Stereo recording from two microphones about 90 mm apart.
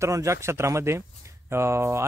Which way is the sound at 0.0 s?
35° right (ahead or behind).